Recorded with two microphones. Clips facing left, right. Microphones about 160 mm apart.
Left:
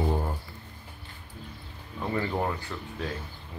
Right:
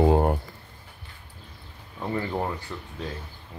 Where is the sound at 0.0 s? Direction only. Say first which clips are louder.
Right 9 dB; 70° right (ahead or behind).